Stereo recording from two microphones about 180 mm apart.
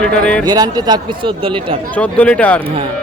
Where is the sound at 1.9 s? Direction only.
10° left (ahead or behind).